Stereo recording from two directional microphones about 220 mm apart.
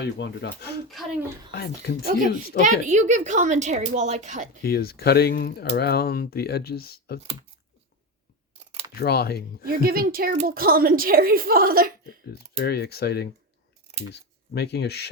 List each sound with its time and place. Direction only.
0.0 s speech: 50° left (ahead or behind)
0.9 s a child's voice: centre (ahead or behind)
1.5 s speech: 45° left (ahead or behind)
2.8 s a woman's voice: 30° right (ahead or behind)
4.6 s speech: 45° left (ahead or behind)
9.0 s speech: 45° left (ahead or behind)
9.8 s a woman's voice: 40° right (ahead or behind)
12.3 s speech: 45° left (ahead or behind)